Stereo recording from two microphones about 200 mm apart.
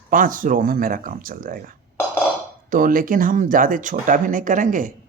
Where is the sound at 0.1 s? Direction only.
40° right (ahead or behind).